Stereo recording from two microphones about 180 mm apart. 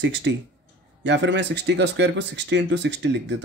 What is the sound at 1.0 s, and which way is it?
Speech, 80° right.